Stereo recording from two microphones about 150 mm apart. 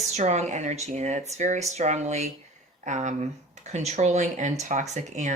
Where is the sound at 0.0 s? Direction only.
50° right (ahead or behind).